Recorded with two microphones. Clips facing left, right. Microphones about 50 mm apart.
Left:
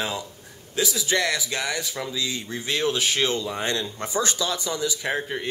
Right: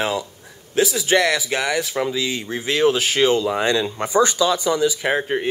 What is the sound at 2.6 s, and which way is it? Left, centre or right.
Speech, right.